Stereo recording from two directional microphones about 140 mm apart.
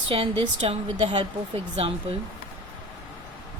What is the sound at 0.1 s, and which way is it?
Speech, 40° right (ahead or behind).